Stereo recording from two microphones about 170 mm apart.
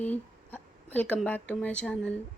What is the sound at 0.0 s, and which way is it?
A woman's voice, 10° left (ahead or behind).